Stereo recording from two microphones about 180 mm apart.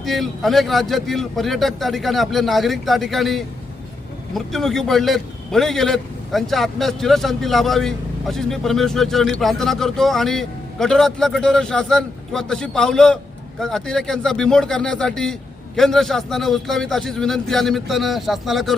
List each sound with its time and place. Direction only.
0.0 s a man's voice: centre (ahead or behind)